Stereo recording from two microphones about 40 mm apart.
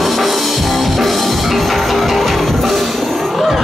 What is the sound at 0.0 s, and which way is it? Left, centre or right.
Music, centre.